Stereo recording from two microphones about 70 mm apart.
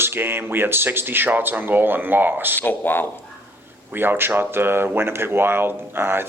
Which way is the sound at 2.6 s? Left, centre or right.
Left.